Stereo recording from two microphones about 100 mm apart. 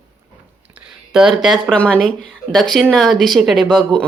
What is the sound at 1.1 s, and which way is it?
Speech, 5° right (ahead or behind).